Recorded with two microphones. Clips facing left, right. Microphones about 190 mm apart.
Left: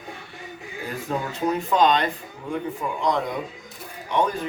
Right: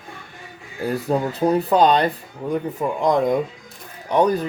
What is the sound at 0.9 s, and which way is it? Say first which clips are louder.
Speech: right 6 dB; 35° right (ahead or behind).